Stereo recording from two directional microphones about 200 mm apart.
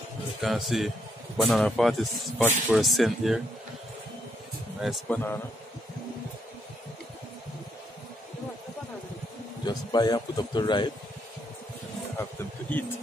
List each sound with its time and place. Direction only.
0.4 s speech: centre (ahead or behind)
4.8 s speech: centre (ahead or behind)
9.7 s speech: 20° left (ahead or behind)
12.2 s a sound: 10° left (ahead or behind)